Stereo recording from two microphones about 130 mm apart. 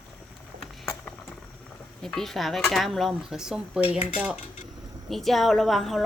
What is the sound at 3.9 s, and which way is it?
Dishes, 10° right (ahead or behind).